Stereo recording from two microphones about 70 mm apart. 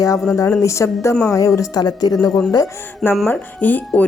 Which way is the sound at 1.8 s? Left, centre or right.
Left.